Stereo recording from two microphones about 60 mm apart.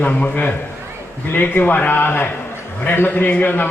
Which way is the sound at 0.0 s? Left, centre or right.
Left.